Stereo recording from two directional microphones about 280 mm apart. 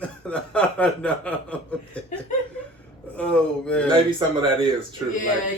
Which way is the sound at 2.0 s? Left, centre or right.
Centre.